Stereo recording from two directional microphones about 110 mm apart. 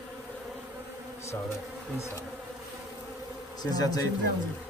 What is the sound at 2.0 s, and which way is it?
Bee, 25° left (ahead or behind).